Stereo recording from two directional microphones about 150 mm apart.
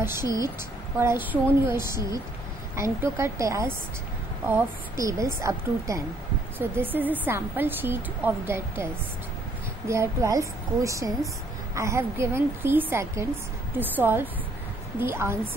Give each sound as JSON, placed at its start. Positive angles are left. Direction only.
{"t": 0.0, "sound": "a woman's voice", "side_deg": -15}
{"t": 9.8, "sound": "a woman's voice", "side_deg": -20}